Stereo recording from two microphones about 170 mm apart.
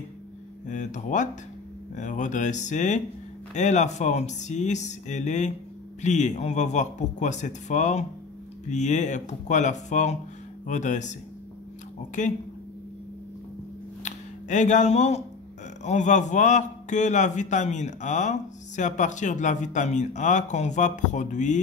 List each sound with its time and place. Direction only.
0.7 s a man's voice: 45° left (ahead or behind)
12.2 s a man's voice: 45° left (ahead or behind)
14.0 s a man's voice: 45° left (ahead or behind)